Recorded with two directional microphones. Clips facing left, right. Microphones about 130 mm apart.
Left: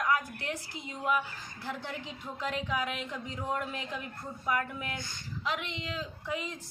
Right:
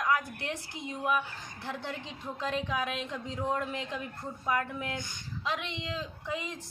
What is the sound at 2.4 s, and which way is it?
A woman's voice, 20° right (ahead or behind).